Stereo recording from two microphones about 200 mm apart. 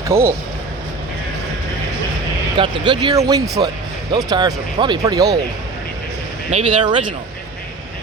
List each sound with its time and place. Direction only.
0.1 s speech: 15° right (ahead or behind)
2.6 s speech: 25° right (ahead or behind)
6.5 s speech: 30° right (ahead or behind)